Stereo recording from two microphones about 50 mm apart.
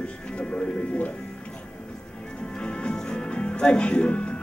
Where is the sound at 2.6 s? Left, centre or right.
Centre.